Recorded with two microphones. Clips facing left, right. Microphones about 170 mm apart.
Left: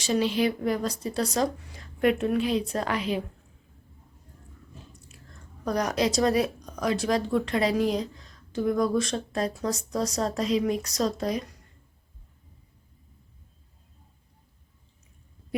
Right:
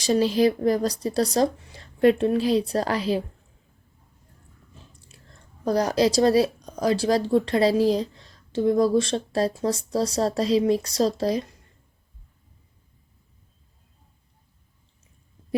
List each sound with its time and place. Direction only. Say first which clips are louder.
0.0 s speech: right 5 dB; 40° right (ahead or behind)
4.9 s speech: left 2 dB; 30° right (ahead or behind)